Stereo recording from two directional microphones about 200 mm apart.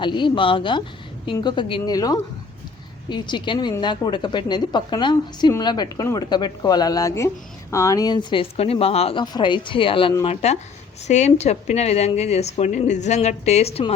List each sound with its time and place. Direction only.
0.0 s a woman's voice: 25° left (ahead or behind)